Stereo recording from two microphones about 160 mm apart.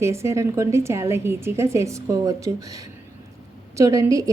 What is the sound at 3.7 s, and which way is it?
Speech, 20° right (ahead or behind).